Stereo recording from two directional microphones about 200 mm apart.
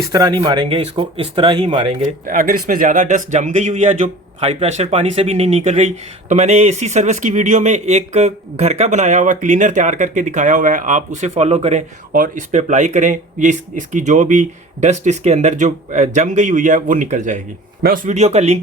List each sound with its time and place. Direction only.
0.1 s speech: 20° right (ahead or behind)
2.2 s speech: 45° right (ahead or behind)